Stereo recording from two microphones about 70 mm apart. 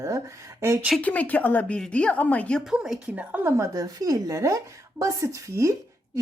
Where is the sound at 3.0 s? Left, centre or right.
Right.